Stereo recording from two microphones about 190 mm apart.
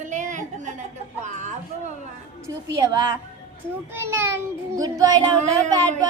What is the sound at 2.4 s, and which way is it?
Speech, 15° right (ahead or behind).